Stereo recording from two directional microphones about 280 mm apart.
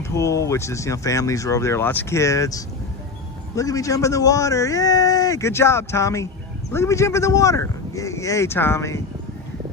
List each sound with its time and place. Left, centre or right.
0.1 s a man's voice: centre